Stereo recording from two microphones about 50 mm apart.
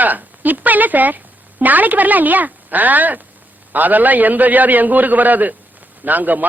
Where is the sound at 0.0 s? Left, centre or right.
Right.